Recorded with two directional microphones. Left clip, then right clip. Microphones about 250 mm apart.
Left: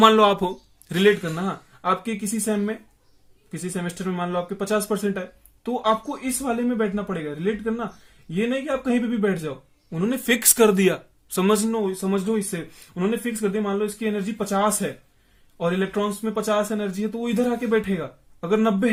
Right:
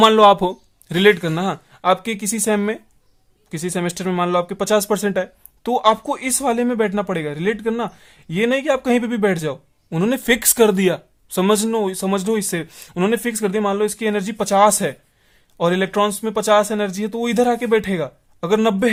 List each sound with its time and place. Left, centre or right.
0.0 s a man's voice: right